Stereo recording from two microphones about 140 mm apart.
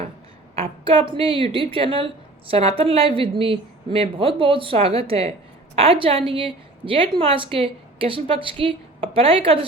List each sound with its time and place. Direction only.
0.5 s a woman's voice: 40° right (ahead or behind)